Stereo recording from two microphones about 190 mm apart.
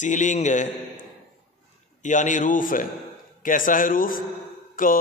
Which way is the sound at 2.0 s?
40° left (ahead or behind).